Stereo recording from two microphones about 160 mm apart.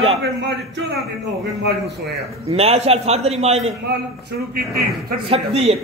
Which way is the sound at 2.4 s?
40° right (ahead or behind).